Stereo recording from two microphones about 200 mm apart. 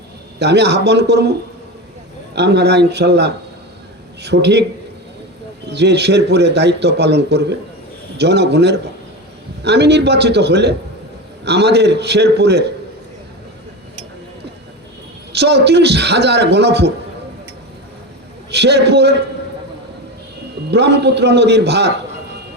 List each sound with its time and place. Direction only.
0.3 s a man's voice: 55° right (ahead or behind)
2.3 s a man's voice: 55° right (ahead or behind)
5.7 s a man's voice: 55° right (ahead or behind)
15.3 s a man's voice: 55° right (ahead or behind)
18.5 s a man's voice: 55° right (ahead or behind)
20.7 s a man's voice: 55° right (ahead or behind)